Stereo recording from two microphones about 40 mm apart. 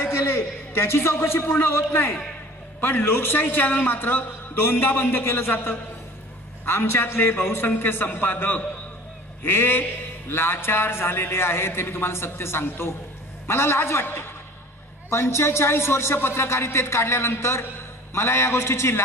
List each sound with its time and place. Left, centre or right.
0.0 s a man's voice: left
2.8 s a man's voice: left
5.2 s a man's voice: left
6.6 s a man's voice: left
7.6 s a man's voice: left
9.4 s a man's voice: left
13.5 s a man's voice: left
15.0 s a man's voice: left